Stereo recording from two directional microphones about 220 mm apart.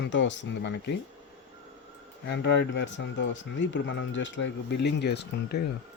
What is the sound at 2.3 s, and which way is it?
Speech, 50° left (ahead or behind).